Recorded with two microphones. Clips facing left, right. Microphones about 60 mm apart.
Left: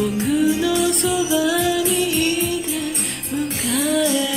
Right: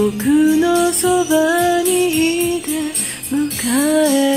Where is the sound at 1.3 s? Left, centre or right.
Right.